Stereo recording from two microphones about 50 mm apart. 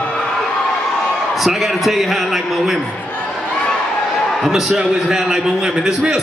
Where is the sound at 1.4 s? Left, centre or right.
Centre.